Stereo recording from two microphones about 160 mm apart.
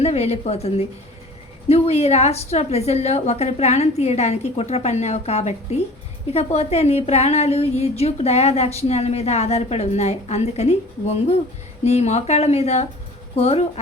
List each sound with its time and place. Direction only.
0.0 s a woman's voice: 40° left (ahead or behind)